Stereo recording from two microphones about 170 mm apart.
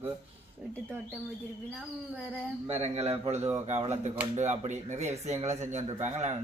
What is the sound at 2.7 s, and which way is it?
Speech, 40° right (ahead or behind).